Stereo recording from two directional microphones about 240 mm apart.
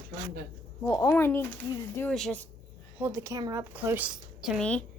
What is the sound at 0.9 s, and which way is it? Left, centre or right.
Speech, centre.